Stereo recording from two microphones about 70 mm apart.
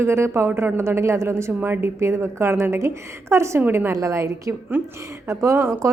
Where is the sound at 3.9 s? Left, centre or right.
Right.